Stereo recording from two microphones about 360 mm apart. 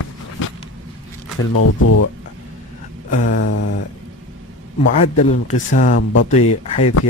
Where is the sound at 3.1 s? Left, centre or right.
Left.